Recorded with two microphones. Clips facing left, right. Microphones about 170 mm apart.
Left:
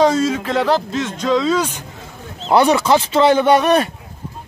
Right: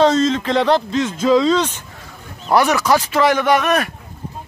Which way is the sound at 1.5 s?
10° left (ahead or behind).